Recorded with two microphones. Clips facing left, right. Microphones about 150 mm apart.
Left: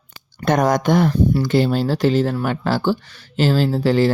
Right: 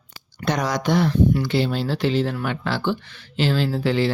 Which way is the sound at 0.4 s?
50° left (ahead or behind).